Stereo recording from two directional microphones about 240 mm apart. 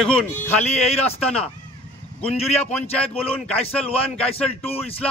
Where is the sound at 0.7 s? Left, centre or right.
Left.